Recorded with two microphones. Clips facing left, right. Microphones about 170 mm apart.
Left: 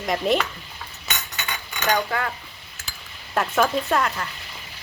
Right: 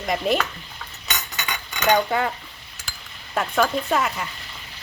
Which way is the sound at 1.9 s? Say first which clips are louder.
Right 4 dB; 25° right (ahead or behind).